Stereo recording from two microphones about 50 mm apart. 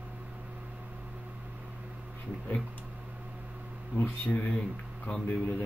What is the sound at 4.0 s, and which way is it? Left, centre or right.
Speech, left.